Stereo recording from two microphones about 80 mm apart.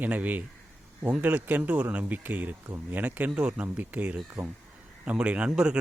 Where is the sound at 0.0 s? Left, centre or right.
Centre.